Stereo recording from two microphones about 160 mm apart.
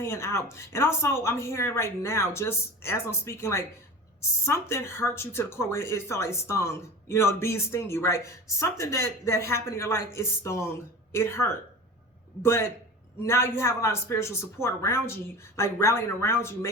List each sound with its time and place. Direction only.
0.0 s speech: 15° left (ahead or behind)